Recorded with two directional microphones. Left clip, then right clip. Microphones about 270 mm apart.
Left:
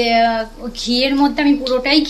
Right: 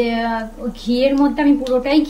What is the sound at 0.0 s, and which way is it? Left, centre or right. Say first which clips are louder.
Speech: left 5 dB; centre.